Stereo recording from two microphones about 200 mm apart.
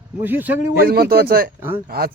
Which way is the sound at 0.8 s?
50° right (ahead or behind).